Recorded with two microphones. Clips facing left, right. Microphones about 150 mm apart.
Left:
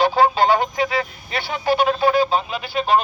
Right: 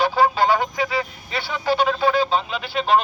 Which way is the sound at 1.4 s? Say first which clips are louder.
Left 2 dB; 15° left (ahead or behind).